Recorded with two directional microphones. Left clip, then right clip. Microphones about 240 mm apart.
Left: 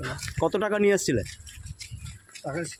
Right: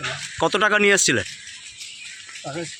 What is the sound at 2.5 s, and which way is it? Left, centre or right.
Speech, centre.